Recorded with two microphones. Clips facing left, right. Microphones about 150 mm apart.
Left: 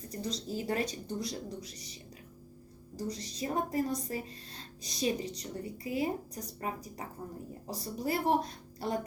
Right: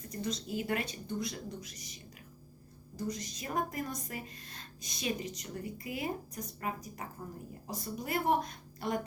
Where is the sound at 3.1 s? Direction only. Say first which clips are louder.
Left 4 dB; 30° left (ahead or behind).